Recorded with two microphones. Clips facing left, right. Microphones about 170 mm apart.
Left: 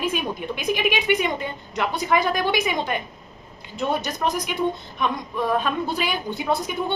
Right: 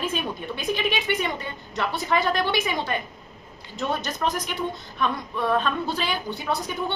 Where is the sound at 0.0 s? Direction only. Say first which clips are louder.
Left 3 dB; 15° left (ahead or behind).